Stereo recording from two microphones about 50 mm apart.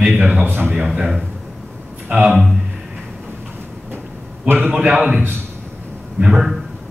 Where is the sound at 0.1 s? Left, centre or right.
Right.